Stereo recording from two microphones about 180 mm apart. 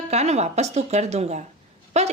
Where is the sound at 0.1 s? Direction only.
35° right (ahead or behind).